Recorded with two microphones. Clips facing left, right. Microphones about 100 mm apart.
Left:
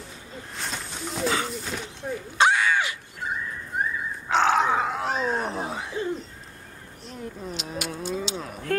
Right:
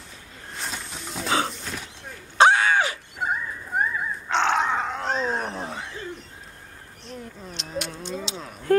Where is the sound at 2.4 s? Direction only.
35° right (ahead or behind).